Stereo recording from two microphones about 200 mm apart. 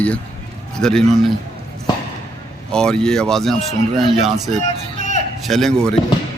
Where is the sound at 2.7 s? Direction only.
5° left (ahead or behind).